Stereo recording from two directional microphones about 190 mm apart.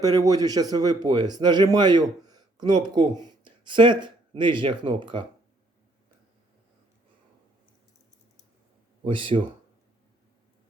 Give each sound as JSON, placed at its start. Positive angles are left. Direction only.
{"t": 0.0, "sound": "speech", "side_deg": -20}
{"t": 9.0, "sound": "speech", "side_deg": -25}